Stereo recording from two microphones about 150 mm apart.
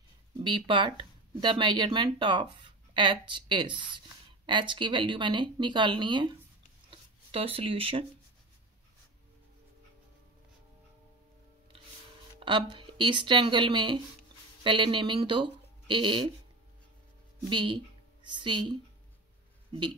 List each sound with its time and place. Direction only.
0.4 s speech: 35° right (ahead or behind)
6.9 s a sound: 40° right (ahead or behind)
12.4 s speech: 30° right (ahead or behind)
17.4 s speech: 30° right (ahead or behind)